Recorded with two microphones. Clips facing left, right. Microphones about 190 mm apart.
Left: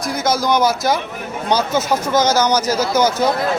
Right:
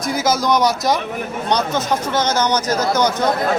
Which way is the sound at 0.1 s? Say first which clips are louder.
Even; centre (ahead or behind).